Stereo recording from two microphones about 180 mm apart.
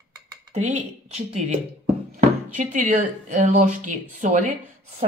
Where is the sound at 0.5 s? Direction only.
40° right (ahead or behind).